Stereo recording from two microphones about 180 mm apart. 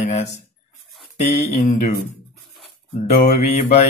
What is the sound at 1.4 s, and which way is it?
Speech, 40° left (ahead or behind).